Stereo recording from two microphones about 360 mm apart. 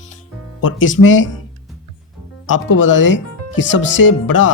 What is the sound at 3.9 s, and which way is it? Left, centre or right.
Music, left.